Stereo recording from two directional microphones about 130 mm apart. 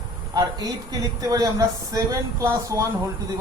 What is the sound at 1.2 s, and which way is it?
Speech, 25° right (ahead or behind).